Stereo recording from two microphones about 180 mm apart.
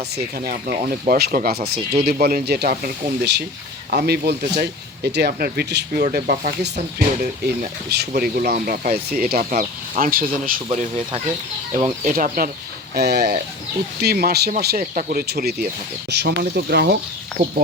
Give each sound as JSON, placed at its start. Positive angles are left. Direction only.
{"t": 0.4, "sound": "speech", "side_deg": -55}
{"t": 10.7, "sound": "speech", "side_deg": -35}
{"t": 12.0, "sound": "speech", "side_deg": -50}
{"t": 12.9, "sound": "speech", "side_deg": -65}